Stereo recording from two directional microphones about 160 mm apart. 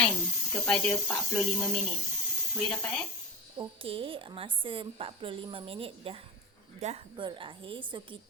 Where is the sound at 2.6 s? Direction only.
5° left (ahead or behind).